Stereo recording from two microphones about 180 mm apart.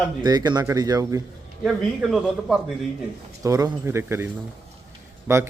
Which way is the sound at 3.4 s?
20° right (ahead or behind).